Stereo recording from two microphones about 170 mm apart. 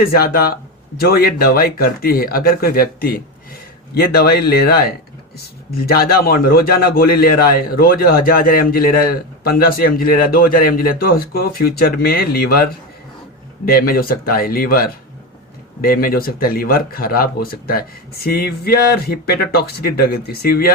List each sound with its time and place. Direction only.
0.0 s a man's voice: 60° left (ahead or behind)
13.7 s a man's voice: 60° left (ahead or behind)